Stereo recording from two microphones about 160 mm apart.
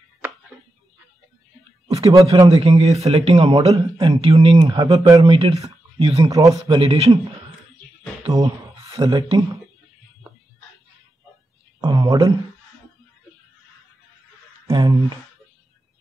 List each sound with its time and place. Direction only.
2.2 s a man's voice: 30° right (ahead or behind)
6.2 s speech: 20° right (ahead or behind)
6.8 s a man's voice: 35° right (ahead or behind)
8.3 s speech: 20° right (ahead or behind)
11.8 s a sound: 25° right (ahead or behind)
14.7 s speech: 25° right (ahead or behind)